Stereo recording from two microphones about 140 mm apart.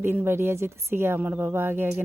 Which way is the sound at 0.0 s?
15° right (ahead or behind).